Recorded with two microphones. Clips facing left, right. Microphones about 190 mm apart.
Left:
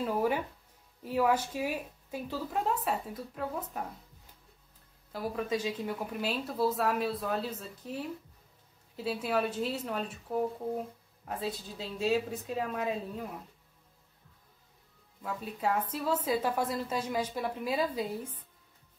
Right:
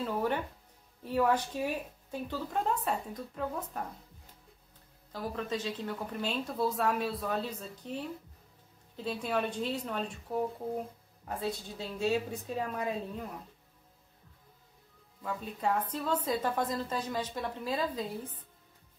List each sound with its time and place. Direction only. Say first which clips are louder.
0.0 s a woman's voice: left 2 dB; 10° left (ahead or behind)
5.1 s a woman's voice: left 3 dB; 10° left (ahead or behind)
15.2 s a woman's voice: even; 5° left (ahead or behind)